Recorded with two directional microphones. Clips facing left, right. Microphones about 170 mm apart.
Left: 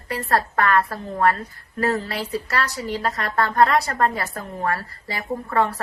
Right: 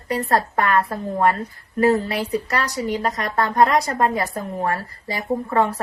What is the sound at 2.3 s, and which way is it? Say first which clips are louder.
A woman's voice: right 2 dB; 15° right (ahead or behind).